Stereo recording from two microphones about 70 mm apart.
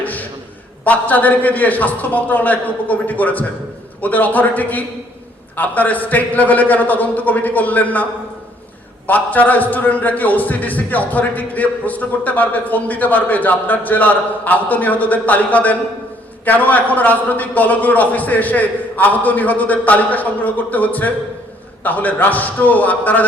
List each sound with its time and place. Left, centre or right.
0.0 s a sound: left
0.9 s a man's voice: left
9.0 s a man's voice: left